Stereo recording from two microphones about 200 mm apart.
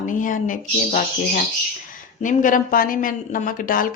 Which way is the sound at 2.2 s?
40° left (ahead or behind).